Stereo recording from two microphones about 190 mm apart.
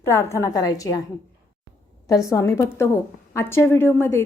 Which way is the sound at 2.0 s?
15° left (ahead or behind).